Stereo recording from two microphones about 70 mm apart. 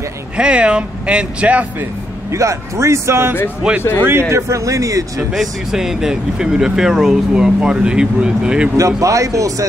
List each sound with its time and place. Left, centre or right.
0.4 s speech: centre
2.3 s speech: right
3.6 s speech: centre
4.0 s speech: right
5.3 s speech: centre
8.7 s speech: right